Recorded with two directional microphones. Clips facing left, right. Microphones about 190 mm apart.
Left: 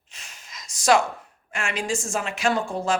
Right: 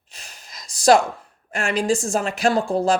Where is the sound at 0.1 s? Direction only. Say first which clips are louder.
Right 2 dB; 35° right (ahead or behind).